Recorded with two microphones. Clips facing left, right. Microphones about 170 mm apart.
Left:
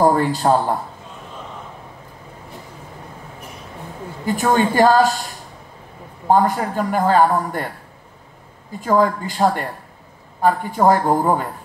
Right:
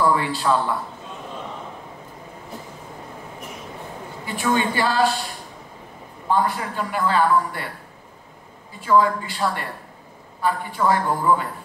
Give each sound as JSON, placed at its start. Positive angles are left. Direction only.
{"t": 0.0, "sound": "a man's voice", "side_deg": 45}
{"t": 4.3, "sound": "a man's voice", "side_deg": 45}
{"t": 8.8, "sound": "a man's voice", "side_deg": 45}